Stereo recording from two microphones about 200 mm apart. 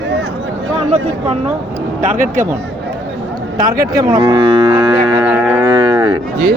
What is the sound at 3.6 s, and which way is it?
Speech, 45° right (ahead or behind).